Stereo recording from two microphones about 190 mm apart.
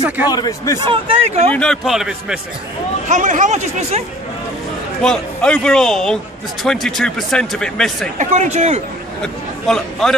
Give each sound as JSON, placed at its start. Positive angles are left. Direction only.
{"t": 0.3, "sound": "a man's voice", "side_deg": 20}
{"t": 0.7, "sound": "speech", "side_deg": -25}
{"t": 1.5, "sound": "speech", "side_deg": 5}
{"t": 3.1, "sound": "speech", "side_deg": -40}
{"t": 5.0, "sound": "speech", "side_deg": 5}
{"t": 8.2, "sound": "speech", "side_deg": -40}
{"t": 9.2, "sound": "a man's voice", "side_deg": 5}